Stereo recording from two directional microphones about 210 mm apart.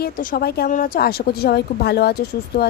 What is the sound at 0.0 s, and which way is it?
A woman's voice, 45° left (ahead or behind).